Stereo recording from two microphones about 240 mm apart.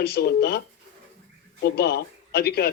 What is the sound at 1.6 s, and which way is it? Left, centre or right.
A man's voice, left.